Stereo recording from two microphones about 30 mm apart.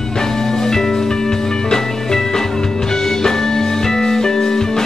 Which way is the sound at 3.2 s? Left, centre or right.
Centre.